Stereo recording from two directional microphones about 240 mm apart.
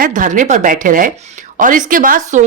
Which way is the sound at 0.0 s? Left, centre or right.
Right.